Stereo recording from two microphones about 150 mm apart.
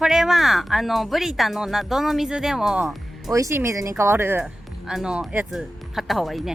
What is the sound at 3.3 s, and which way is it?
Speech, 20° right (ahead or behind).